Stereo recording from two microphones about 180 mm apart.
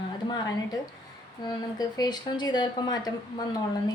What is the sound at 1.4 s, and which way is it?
A woman's voice, 20° left (ahead or behind).